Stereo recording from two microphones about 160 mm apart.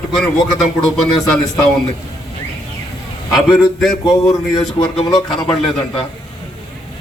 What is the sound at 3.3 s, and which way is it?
Speech, 5° right (ahead or behind).